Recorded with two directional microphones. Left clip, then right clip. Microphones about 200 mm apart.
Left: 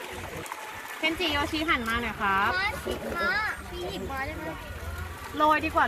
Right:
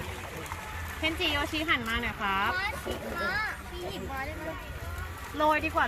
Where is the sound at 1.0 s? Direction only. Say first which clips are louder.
Left 2 dB; 15° right (ahead or behind).